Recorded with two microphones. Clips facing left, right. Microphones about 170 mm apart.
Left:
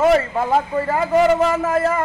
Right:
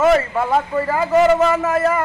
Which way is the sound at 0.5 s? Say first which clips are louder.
Left 1 dB; 30° left (ahead or behind).